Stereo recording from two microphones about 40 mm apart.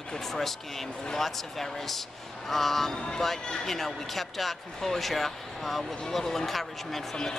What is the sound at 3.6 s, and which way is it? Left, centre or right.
A man's voice, centre.